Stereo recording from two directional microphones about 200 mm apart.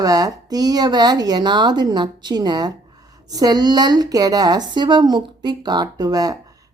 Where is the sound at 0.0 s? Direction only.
20° right (ahead or behind).